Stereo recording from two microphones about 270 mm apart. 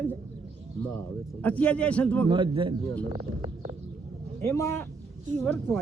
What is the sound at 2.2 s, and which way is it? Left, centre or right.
Speech, centre.